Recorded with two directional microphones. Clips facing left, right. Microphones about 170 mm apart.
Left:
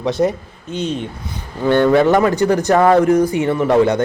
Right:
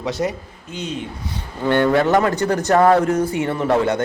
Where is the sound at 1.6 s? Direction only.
20° left (ahead or behind).